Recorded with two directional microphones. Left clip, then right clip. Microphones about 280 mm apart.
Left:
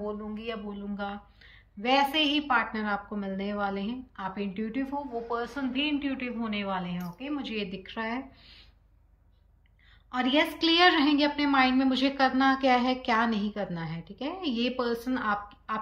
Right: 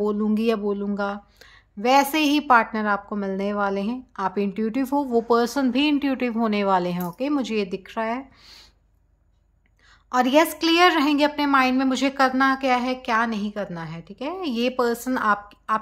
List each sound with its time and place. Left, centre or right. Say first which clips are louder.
0.1 s a woman's voice: right 13 dB; right
10.1 s a woman's voice: right 8 dB; centre